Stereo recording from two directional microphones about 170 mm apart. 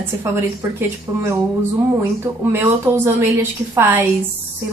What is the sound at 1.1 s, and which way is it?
Speech, 20° right (ahead or behind).